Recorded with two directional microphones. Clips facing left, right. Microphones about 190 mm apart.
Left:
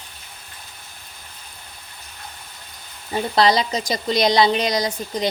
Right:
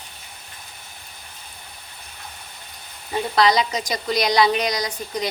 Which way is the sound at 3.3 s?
30° left (ahead or behind).